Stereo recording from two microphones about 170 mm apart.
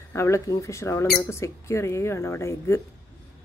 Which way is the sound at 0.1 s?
15° left (ahead or behind).